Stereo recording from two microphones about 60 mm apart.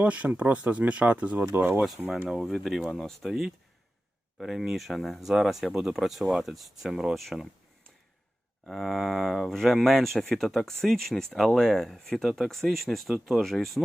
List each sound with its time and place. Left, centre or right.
0.0 s speech: right
1.5 s speech: right
2.2 s speech: centre
8.6 s speech: centre